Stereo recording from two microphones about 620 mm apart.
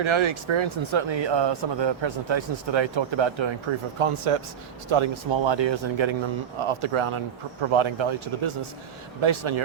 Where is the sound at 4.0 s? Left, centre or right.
Right.